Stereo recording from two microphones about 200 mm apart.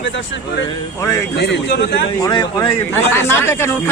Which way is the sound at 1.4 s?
60° left (ahead or behind).